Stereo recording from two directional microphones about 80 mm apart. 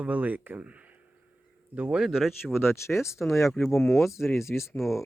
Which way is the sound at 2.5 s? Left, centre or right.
Left.